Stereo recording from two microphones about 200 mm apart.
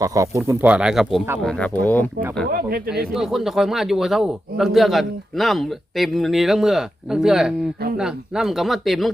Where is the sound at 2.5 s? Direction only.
50° right (ahead or behind).